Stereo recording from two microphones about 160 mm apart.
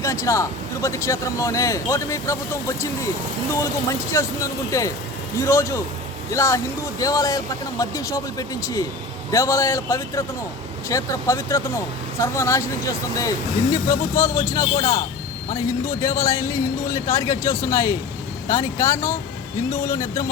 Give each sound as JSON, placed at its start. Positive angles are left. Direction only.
{"t": 0.0, "sound": "speech", "side_deg": 20}
{"t": 4.1, "sound": "speech", "side_deg": 15}
{"t": 16.0, "sound": "speech", "side_deg": 20}